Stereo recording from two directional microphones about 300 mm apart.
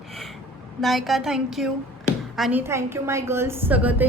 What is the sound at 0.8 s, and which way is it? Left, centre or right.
A woman's voice, centre.